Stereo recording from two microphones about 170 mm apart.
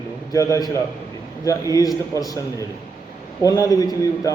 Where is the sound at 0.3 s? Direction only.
20° left (ahead or behind).